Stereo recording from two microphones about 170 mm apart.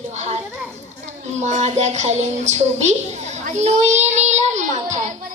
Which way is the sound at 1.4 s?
45° right (ahead or behind).